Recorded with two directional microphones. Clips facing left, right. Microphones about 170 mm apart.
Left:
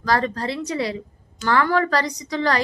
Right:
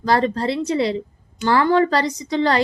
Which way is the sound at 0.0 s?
30° right (ahead or behind).